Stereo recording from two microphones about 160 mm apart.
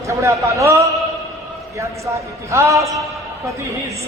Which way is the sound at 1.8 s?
20° right (ahead or behind).